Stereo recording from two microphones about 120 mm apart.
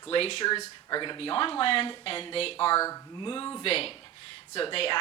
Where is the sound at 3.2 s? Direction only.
40° left (ahead or behind).